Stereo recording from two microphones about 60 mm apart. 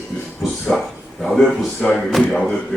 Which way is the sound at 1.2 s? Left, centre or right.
Centre.